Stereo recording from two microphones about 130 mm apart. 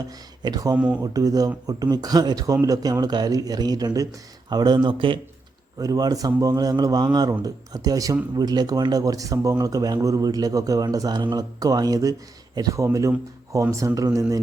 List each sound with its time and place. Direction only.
0.4 s speech: 30° right (ahead or behind)
5.8 s speech: 30° right (ahead or behind)